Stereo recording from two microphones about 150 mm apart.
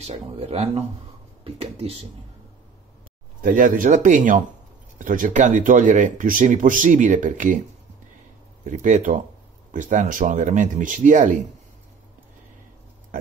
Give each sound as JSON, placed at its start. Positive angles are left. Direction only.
{"t": 0.0, "sound": "speech", "side_deg": -45}
{"t": 3.4, "sound": "speech", "side_deg": -65}
{"t": 8.6, "sound": "speech", "side_deg": -55}